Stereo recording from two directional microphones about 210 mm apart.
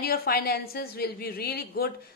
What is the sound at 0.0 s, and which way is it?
A woman's voice, 45° left (ahead or behind).